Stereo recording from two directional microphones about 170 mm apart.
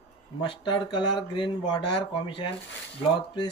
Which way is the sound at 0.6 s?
25° left (ahead or behind).